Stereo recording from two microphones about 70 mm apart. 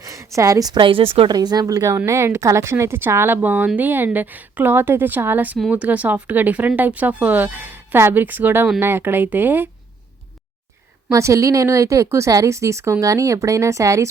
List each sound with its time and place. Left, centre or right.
0.0 s a sound: right
1.3 s speech: right
2.0 s speech: right
11.1 s speech: right